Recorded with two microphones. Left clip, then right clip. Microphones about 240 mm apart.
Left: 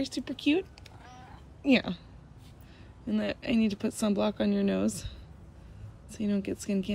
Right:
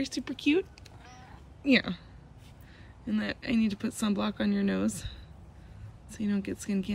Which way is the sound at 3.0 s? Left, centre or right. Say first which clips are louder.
Left 2 dB; centre.